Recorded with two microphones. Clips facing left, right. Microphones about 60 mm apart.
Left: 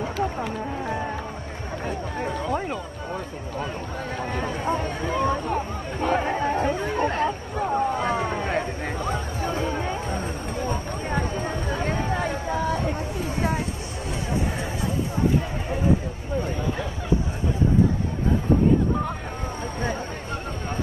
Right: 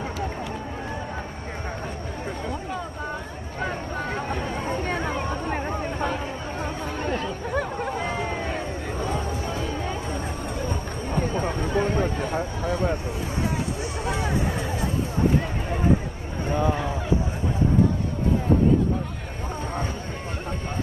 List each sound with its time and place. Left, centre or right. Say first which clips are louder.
6.0 s chatter: left 6 dB; left
7.0 s chatter: left 4 dB; left
8.0 s boat: left 3 dB; left